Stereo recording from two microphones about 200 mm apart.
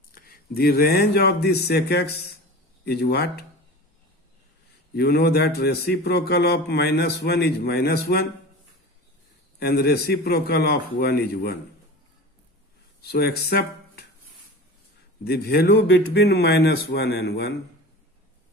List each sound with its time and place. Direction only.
0.1 s a man's voice: 45° left (ahead or behind)
4.9 s a man's voice: 55° left (ahead or behind)
9.6 s a man's voice: 50° left (ahead or behind)
13.0 s speech: 55° left (ahead or behind)
15.2 s a man's voice: 55° left (ahead or behind)